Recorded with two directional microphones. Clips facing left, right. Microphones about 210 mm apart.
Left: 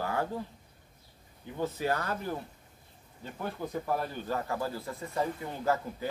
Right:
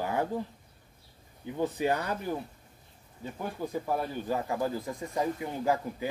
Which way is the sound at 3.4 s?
10° right (ahead or behind).